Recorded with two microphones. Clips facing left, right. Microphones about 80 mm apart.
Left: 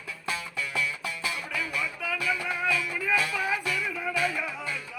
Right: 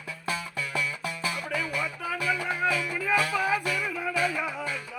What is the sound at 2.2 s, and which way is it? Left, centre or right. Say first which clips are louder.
Music: right 3 dB; right.